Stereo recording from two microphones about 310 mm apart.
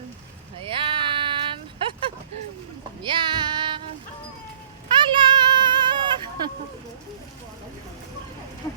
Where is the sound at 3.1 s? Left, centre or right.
Centre.